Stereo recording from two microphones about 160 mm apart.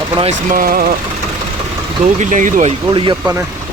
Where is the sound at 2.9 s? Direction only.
30° right (ahead or behind).